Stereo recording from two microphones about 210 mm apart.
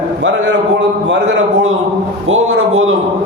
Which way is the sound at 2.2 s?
70° right (ahead or behind).